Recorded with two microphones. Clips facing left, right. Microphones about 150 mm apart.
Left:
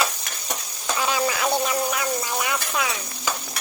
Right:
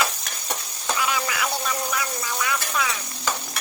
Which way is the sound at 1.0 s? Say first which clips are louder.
Left 3 dB; 30° left (ahead or behind).